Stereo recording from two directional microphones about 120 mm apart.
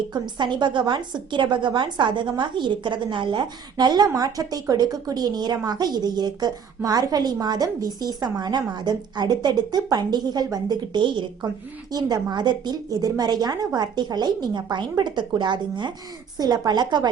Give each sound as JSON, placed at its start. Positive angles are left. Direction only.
{"t": 0.1, "sound": "a woman's voice", "side_deg": -40}